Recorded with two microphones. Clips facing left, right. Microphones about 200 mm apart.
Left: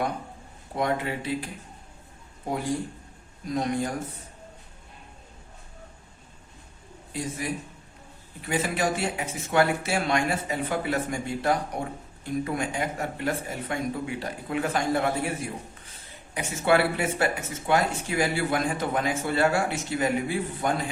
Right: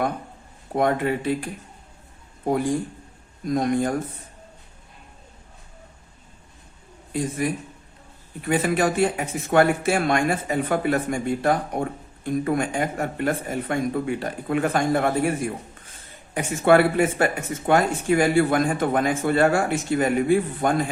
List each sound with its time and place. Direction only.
0.8 s a man's voice: 50° right (ahead or behind)
3.4 s a man's voice: 50° right (ahead or behind)
7.1 s a man's voice: 50° right (ahead or behind)
8.4 s a man's voice: 55° right (ahead or behind)
16.3 s a man's voice: 50° right (ahead or behind)